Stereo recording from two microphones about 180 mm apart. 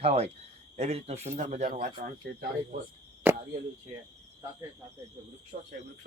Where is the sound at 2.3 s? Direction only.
65° right (ahead or behind).